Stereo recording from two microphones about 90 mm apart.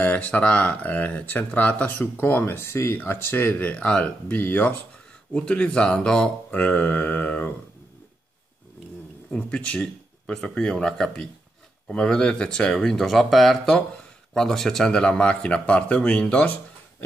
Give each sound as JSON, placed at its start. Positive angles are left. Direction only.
{"t": 0.0, "sound": "speech", "side_deg": 15}
{"t": 9.3, "sound": "speech", "side_deg": 15}